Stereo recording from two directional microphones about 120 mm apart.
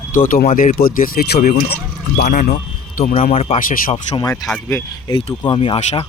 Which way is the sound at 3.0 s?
60° left (ahead or behind).